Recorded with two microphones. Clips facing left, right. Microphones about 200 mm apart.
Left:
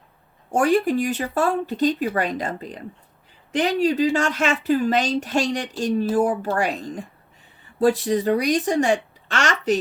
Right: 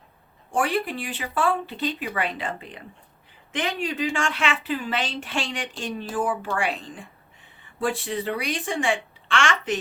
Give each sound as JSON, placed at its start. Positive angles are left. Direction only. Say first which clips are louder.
{"t": 0.5, "sound": "speech", "louder": "left 7 dB", "side_deg": 45}